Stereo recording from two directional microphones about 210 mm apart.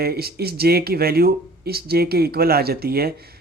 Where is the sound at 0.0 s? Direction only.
50° right (ahead or behind).